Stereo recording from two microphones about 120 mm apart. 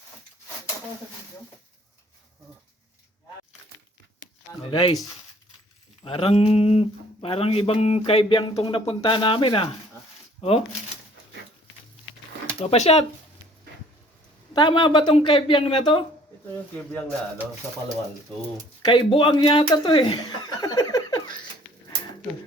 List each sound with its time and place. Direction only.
4.7 s speech: 40° left (ahead or behind)
6.1 s speech: 55° left (ahead or behind)
12.5 s speech: 65° left (ahead or behind)
14.5 s speech: 40° left (ahead or behind)
18.8 s speech: 45° left (ahead or behind); by 21.2 s 30° left (ahead or behind)